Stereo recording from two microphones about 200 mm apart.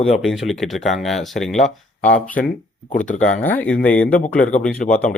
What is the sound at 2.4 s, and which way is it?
Speech, 50° left (ahead or behind).